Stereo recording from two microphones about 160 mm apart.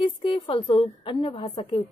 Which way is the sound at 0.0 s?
35° left (ahead or behind).